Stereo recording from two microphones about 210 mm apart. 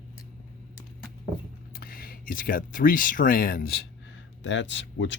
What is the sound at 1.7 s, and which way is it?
Speech, 45° left (ahead or behind).